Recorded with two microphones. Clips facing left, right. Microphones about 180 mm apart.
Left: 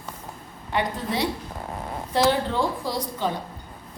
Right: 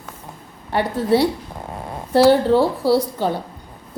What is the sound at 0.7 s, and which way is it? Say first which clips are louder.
A woman's voice: right 8 dB; 35° right (ahead or behind).